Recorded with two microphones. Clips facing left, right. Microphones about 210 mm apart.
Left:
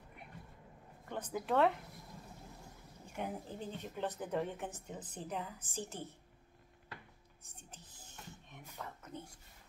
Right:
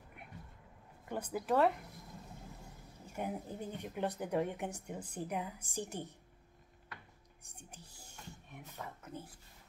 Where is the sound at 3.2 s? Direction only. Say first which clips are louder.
Right 2 dB; 10° right (ahead or behind).